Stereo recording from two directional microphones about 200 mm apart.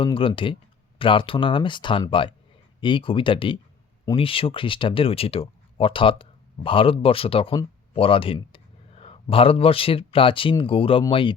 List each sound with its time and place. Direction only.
0.0 s speech: 25° left (ahead or behind)